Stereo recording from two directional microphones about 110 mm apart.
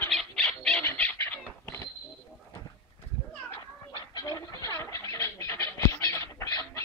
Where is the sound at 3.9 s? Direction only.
35° left (ahead or behind).